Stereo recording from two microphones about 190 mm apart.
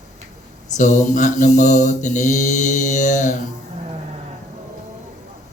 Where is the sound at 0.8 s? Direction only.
40° left (ahead or behind).